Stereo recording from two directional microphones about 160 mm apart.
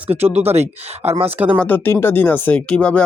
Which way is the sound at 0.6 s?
40° right (ahead or behind).